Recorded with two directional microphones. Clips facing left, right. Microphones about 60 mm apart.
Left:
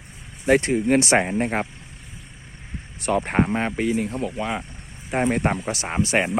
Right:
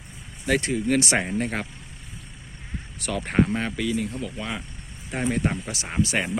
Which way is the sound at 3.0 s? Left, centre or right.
Left.